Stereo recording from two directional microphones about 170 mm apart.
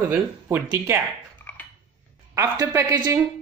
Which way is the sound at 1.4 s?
10° left (ahead or behind).